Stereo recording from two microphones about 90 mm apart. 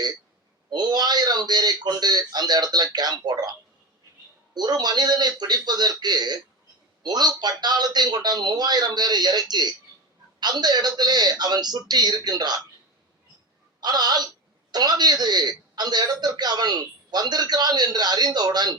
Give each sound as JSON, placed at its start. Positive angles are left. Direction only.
{"t": 0.7, "sound": "a man's voice", "side_deg": -50}
{"t": 4.5, "sound": "a man's voice", "side_deg": -50}
{"t": 13.8, "sound": "a man's voice", "side_deg": -50}